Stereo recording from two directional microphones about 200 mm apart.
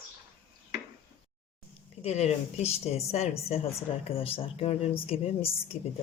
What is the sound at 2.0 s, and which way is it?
A woman's voice, 30° left (ahead or behind).